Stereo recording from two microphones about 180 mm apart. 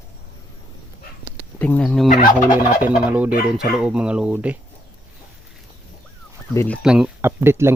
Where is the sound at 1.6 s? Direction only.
5° left (ahead or behind).